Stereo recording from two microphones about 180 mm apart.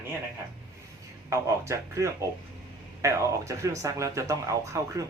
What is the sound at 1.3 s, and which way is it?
Speech, 15° right (ahead or behind).